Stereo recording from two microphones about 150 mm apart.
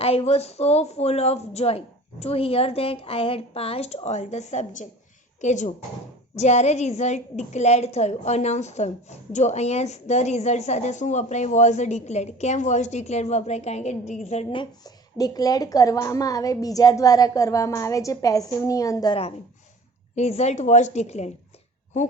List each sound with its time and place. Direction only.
0.0 s a woman's voice: 40° left (ahead or behind)
14.5 s a woman's voice: 30° left (ahead or behind)
20.1 s a woman's voice: 45° left (ahead or behind)